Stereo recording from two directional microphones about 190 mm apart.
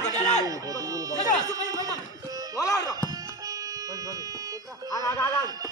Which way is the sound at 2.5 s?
15° left (ahead or behind).